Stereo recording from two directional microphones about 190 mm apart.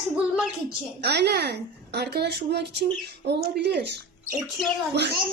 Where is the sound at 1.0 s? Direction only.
60° right (ahead or behind).